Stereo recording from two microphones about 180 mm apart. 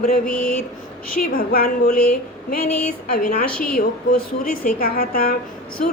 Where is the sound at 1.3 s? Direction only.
55° left (ahead or behind).